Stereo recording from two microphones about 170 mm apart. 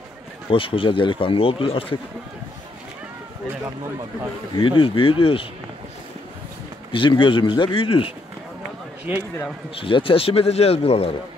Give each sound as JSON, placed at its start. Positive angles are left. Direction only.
{"t": 0.5, "sound": "speech", "side_deg": 30}
{"t": 4.6, "sound": "speech", "side_deg": 30}
{"t": 6.9, "sound": "a man's voice", "side_deg": 30}
{"t": 9.8, "sound": "speech", "side_deg": 30}